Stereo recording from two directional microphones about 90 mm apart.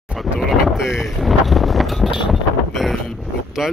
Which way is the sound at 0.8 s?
5° right (ahead or behind).